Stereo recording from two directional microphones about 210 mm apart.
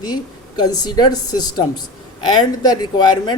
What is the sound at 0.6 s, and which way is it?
Speech, 20° left (ahead or behind).